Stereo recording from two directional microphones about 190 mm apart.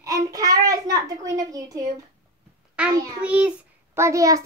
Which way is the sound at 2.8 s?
5° right (ahead or behind).